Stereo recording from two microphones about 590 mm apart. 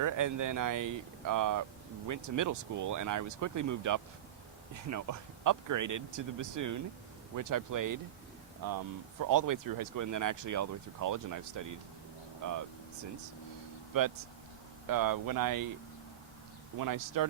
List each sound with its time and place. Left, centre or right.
0.0 s speech: right
9.2 s speech: right
13.9 s speech: right
16.7 s speech: right